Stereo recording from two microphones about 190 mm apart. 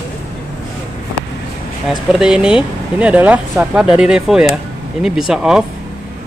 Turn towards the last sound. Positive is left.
turn(degrees=-5)  # may be behind; listen again after turning